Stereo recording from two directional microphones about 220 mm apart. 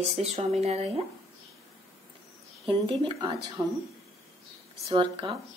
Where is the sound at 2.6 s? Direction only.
25° right (ahead or behind).